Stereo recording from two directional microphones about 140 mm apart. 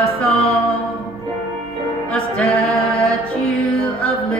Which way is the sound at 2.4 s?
45° left (ahead or behind).